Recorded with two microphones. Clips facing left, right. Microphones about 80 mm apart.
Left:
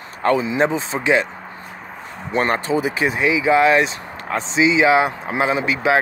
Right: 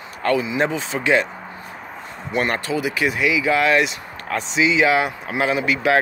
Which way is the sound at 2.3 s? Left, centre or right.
Left.